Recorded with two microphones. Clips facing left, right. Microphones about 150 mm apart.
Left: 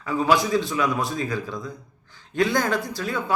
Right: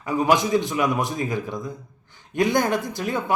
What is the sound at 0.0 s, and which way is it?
Speech, 20° right (ahead or behind).